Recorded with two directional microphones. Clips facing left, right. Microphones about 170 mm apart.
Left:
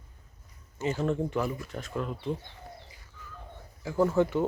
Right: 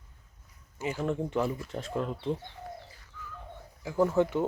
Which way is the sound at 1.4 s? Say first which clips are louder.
Right 1 dB; 25° right (ahead or behind).